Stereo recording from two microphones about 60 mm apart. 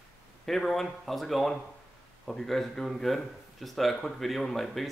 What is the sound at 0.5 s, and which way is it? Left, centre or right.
Speech, centre.